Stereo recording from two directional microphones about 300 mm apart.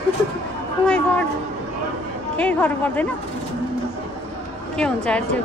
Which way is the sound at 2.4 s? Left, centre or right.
Centre.